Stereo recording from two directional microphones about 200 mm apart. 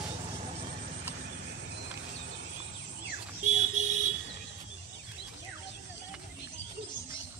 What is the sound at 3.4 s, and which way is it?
Car alarm, 35° right (ahead or behind).